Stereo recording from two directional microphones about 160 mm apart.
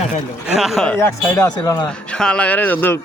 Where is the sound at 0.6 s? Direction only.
Centre (ahead or behind).